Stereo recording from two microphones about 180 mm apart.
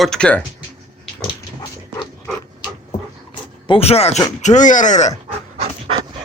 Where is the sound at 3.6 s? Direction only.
30° left (ahead or behind).